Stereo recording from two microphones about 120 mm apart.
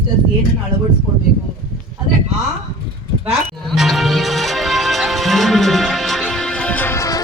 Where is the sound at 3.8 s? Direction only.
Centre (ahead or behind).